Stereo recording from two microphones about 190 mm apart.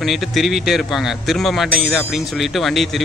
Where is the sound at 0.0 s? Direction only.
Centre (ahead or behind).